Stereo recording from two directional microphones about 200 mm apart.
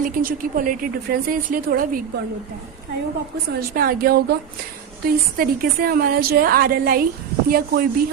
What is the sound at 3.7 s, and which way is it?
A woman's voice, 45° right (ahead or behind).